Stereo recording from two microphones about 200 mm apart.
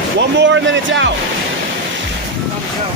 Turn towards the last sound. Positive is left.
turn(degrees=-65)  # may be behind; listen again after turning